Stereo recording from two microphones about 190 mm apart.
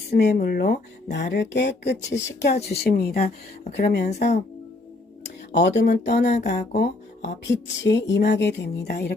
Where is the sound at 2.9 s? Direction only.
55° left (ahead or behind).